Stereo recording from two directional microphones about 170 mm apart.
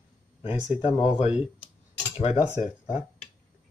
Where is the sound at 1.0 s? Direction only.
40° left (ahead or behind).